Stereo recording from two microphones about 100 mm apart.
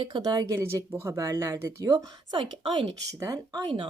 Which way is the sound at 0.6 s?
30° right (ahead or behind).